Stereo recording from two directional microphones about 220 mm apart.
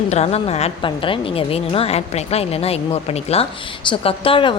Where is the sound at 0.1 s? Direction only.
30° left (ahead or behind).